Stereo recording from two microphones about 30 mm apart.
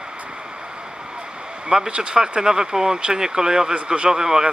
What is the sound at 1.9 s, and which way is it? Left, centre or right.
Speech, right.